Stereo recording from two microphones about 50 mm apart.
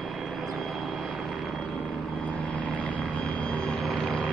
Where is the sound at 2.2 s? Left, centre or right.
Left.